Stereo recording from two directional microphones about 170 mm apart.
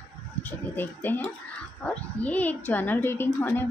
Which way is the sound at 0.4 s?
10° left (ahead or behind).